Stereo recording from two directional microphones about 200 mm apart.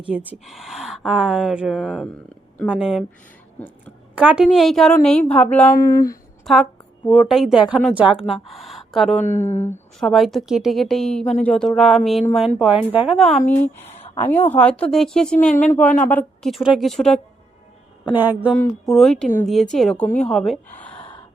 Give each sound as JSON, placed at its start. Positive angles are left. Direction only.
{"t": 0.1, "sound": "a woman's voice", "side_deg": -10}
{"t": 4.1, "sound": "a woman's voice", "side_deg": -5}
{"t": 6.4, "sound": "a woman's voice", "side_deg": 0}
{"t": 9.3, "sound": "speech", "side_deg": 35}
{"t": 10.0, "sound": "a woman's voice", "side_deg": 0}
{"t": 18.0, "sound": "a woman's voice", "side_deg": -10}
{"t": 18.9, "sound": "a woman's voice", "side_deg": 0}